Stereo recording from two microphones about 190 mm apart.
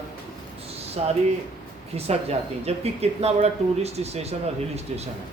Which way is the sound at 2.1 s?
35° right (ahead or behind).